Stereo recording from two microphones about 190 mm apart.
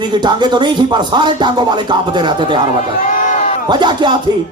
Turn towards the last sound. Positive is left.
turn(degrees=-25)  # may be behind; listen again after turning